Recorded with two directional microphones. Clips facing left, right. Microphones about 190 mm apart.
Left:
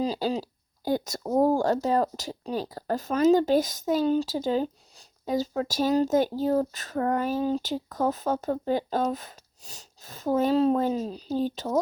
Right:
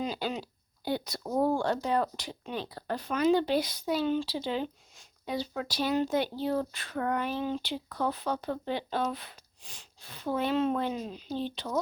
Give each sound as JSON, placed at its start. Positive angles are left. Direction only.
{"t": 0.0, "sound": "speech", "side_deg": 35}
{"t": 0.9, "sound": "speech", "side_deg": 45}